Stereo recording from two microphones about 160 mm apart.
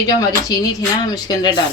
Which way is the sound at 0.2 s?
20° left (ahead or behind).